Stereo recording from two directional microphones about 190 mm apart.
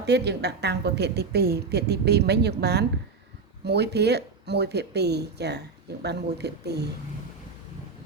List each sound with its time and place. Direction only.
0.0 s a woman's voice: 60° right (ahead or behind)